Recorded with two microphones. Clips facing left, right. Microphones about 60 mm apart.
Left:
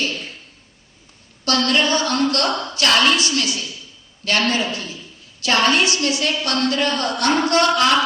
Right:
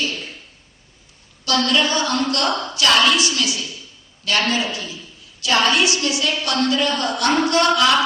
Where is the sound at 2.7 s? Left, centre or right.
Left.